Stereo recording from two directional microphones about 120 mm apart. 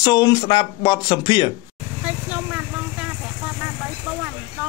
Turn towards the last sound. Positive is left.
turn(degrees=-10)  # may be behind; listen again after turning